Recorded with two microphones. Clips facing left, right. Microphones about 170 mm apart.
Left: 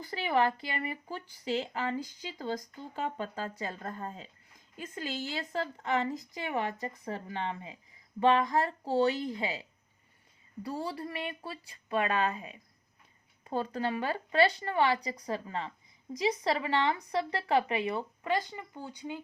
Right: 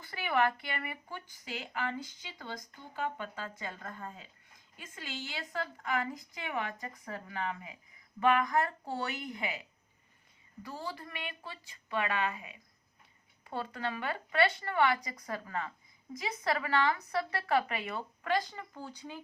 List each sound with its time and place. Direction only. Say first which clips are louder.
0.1 s speech: left 2 dB; 20° left (ahead or behind)
6.3 s speech: left 2 dB; 35° left (ahead or behind)
6.8 s speech: left 5 dB; 25° left (ahead or behind)